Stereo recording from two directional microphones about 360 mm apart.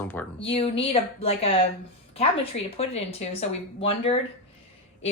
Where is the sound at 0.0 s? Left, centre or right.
Centre.